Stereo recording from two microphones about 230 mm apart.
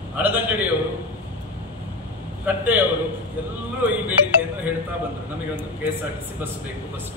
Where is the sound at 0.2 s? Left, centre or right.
Centre.